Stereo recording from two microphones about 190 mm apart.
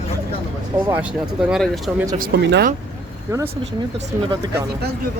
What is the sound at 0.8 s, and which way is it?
Speech, 10° right (ahead or behind).